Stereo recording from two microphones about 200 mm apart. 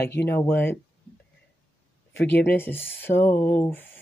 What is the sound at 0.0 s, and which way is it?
Speech, 10° left (ahead or behind).